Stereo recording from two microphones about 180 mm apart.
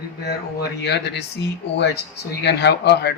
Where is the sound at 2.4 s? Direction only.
70° left (ahead or behind).